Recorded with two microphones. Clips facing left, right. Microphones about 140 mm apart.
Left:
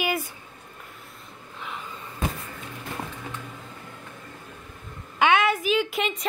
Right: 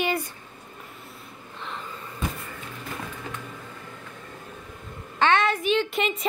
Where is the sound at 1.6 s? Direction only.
5° left (ahead or behind).